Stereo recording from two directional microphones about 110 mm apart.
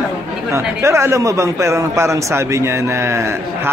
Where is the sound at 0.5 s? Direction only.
25° right (ahead or behind).